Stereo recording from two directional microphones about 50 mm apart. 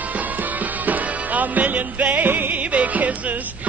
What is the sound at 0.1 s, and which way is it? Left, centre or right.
Music, right.